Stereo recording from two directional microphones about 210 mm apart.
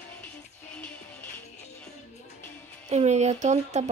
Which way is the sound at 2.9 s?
35° right (ahead or behind).